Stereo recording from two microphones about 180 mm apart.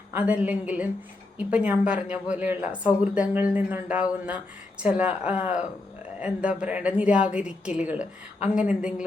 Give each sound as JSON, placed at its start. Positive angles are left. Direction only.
{"t": 0.1, "sound": "a woman's voice", "side_deg": -10}